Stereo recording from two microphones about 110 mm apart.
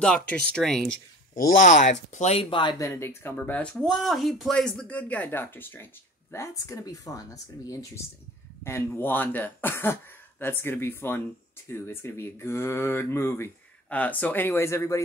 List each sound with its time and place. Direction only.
0.0 s speech: 10° left (ahead or behind)
1.7 s speech: 90° left
2.5 s speech: 45° left (ahead or behind)
2.8 s speech: 25° left (ahead or behind)
3.7 s speech: centre (ahead or behind); by 15.0 s 25° left (ahead or behind)